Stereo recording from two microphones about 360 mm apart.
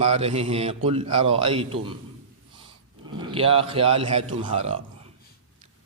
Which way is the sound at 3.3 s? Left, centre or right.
Centre.